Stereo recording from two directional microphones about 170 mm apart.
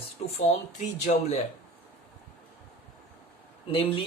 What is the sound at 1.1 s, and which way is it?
Speech, 45° left (ahead or behind).